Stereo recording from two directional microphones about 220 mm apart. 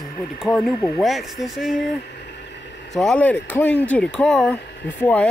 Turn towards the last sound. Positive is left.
turn(degrees=5)  # may be behind; listen again after turning